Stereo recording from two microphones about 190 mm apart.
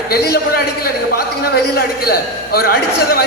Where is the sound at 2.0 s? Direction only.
50° left (ahead or behind).